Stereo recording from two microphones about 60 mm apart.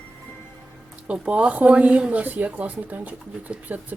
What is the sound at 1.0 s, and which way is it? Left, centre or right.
Speech, right.